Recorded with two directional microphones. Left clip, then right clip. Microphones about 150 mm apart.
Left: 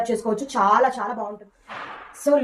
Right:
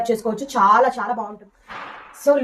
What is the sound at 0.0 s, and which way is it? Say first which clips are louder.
Speech: right 2 dB; 30° right (ahead or behind).